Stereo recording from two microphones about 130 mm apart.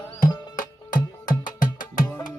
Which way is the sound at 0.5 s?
90° left.